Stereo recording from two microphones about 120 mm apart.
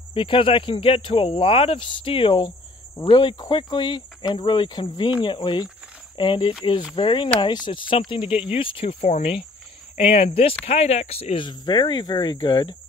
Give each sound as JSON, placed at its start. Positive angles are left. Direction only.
{"t": 0.1, "sound": "speech", "side_deg": 45}
{"t": 11.4, "sound": "speech", "side_deg": 40}